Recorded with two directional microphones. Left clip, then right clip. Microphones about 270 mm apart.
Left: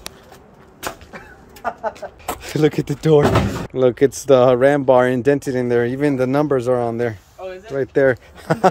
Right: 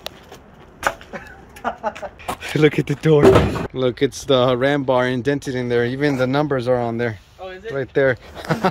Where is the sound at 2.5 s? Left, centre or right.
Centre.